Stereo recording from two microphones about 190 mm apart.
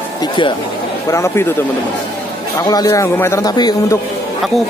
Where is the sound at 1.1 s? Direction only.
15° left (ahead or behind).